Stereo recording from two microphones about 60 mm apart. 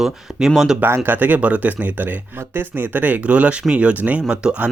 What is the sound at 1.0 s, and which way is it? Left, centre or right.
Speech, right.